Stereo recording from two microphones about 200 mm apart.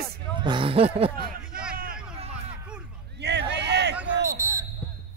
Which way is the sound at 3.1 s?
60° right (ahead or behind).